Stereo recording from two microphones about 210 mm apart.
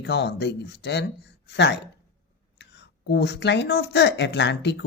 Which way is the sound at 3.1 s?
50° left (ahead or behind).